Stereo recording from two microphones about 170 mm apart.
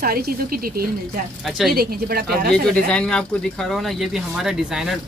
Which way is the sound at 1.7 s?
65° right (ahead or behind).